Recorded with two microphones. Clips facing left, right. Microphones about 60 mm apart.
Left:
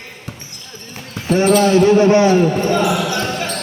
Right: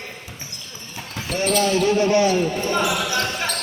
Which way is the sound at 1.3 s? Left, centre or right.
Left.